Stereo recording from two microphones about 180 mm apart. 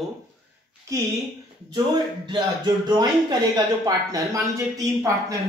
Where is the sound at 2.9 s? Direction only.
25° right (ahead or behind).